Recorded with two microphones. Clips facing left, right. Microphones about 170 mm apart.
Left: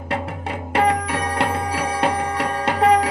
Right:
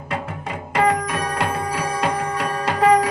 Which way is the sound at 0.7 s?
30° left (ahead or behind).